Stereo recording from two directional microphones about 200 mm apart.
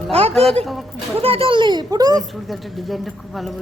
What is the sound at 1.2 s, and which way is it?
Speech, 30° right (ahead or behind).